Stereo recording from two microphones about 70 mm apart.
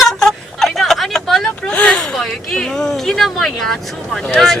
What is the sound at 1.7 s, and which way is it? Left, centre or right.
Speech, centre.